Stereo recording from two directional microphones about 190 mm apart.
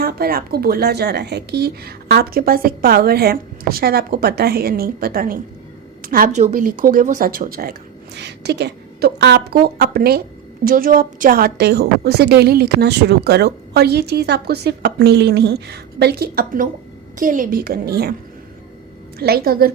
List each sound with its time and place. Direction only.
0.0 s speech: 55° right (ahead or behind)
19.2 s speech: 55° right (ahead or behind)